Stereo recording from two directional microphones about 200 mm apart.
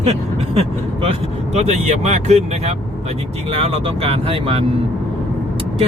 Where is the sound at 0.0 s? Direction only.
30° right (ahead or behind).